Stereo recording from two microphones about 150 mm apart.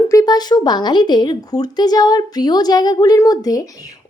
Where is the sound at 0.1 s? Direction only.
25° left (ahead or behind).